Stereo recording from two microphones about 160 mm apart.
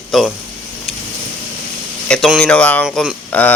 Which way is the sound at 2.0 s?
5° left (ahead or behind).